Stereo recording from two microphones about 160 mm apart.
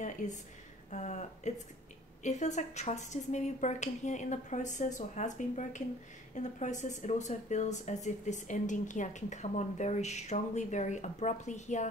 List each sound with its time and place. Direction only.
0.9 s speech: 45° left (ahead or behind)